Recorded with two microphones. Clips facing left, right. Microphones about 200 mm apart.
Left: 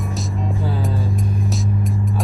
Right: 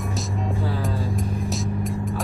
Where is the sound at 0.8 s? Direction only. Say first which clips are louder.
Left 2 dB; centre (ahead or behind).